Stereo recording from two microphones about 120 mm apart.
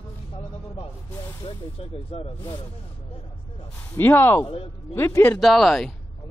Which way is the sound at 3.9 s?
20° left (ahead or behind).